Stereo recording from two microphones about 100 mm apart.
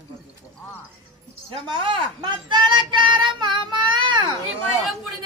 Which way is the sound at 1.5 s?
60° right (ahead or behind).